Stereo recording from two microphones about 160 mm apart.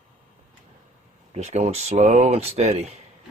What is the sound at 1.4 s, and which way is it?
Speech, 45° right (ahead or behind).